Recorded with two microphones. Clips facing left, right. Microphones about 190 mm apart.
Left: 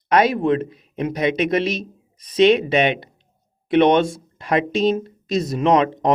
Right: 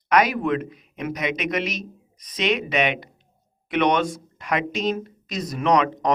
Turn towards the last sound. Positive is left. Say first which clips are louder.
# left 3 dB
turn(degrees=30)  # may be behind; listen again after turning